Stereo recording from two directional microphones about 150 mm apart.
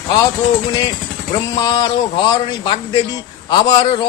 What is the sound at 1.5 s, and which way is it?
A man's voice, 30° left (ahead or behind).